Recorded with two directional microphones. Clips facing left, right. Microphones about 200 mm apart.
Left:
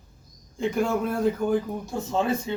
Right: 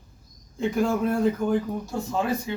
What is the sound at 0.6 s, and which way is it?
Speech, centre (ahead or behind).